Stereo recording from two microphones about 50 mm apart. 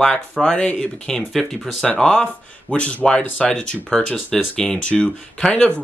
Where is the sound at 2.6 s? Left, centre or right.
Left.